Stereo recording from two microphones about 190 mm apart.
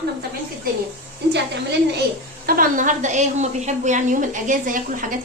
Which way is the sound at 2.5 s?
50° right (ahead or behind).